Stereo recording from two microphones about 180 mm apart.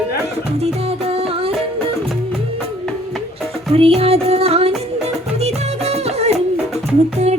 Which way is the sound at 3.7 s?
30° right (ahead or behind).